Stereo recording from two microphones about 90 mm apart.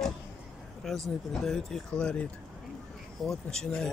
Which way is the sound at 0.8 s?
5° left (ahead or behind).